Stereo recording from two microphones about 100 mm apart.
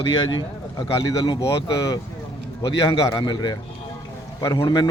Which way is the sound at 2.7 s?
55° left (ahead or behind).